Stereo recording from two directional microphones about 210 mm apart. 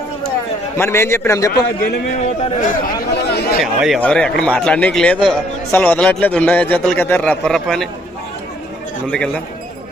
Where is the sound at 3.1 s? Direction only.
50° left (ahead or behind).